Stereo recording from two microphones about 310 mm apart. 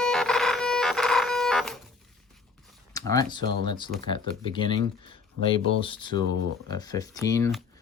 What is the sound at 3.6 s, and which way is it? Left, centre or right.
Speech, centre.